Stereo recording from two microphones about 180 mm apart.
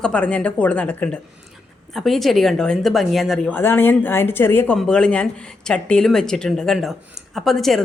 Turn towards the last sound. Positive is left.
turn(degrees=0)  # may be behind; listen again after turning